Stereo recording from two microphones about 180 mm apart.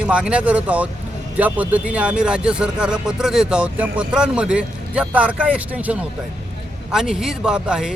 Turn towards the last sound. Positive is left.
turn(degrees=-5)  # may be behind; listen again after turning